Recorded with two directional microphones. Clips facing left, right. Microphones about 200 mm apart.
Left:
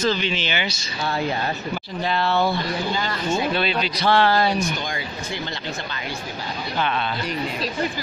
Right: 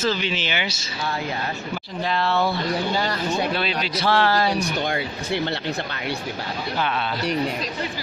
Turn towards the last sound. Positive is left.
turn(degrees=-5)  # may be behind; listen again after turning